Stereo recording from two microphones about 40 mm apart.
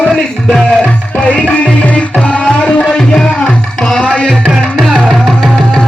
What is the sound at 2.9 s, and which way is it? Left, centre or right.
Music, centre.